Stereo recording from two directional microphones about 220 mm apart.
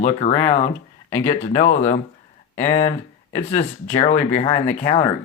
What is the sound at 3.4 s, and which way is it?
Speech, 30° left (ahead or behind).